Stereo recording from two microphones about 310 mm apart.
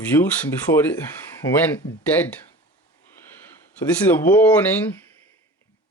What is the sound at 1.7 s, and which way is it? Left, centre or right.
Speech, centre.